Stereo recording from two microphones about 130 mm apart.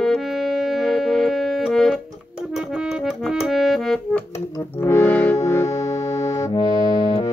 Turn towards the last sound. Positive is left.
turn(degrees=30)  # may be behind; listen again after turning